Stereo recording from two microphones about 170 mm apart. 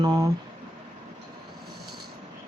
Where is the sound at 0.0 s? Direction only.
25° right (ahead or behind).